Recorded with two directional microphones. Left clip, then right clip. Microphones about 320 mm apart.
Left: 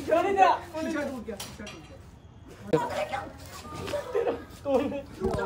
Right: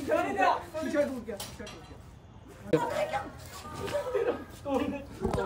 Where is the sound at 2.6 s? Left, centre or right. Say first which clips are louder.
Left 1 dB; centre.